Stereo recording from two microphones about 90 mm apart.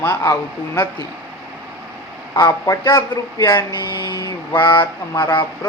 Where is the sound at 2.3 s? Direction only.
40° left (ahead or behind).